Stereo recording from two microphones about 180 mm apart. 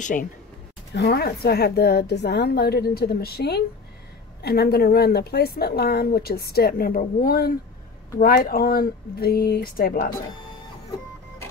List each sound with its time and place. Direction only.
0.0 s speech: 50° left (ahead or behind)
0.9 s a woman's voice: 65° left (ahead or behind)